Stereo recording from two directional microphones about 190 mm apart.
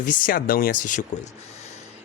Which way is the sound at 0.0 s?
45° left (ahead or behind).